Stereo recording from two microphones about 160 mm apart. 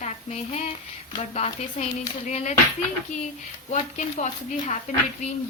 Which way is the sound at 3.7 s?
45° left (ahead or behind).